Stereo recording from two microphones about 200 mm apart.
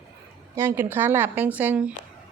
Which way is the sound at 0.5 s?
10° right (ahead or behind).